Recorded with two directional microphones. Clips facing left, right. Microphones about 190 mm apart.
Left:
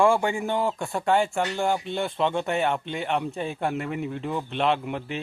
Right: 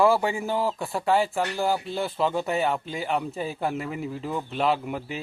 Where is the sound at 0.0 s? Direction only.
5° right (ahead or behind).